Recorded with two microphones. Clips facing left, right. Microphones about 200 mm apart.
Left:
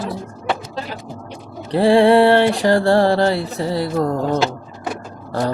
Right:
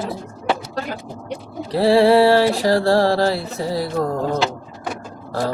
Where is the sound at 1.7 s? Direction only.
5° right (ahead or behind).